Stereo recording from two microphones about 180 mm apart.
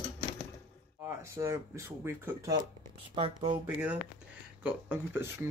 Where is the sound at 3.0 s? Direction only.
30° right (ahead or behind).